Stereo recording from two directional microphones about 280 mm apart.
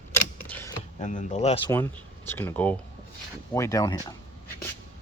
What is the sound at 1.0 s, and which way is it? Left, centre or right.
Speech, left.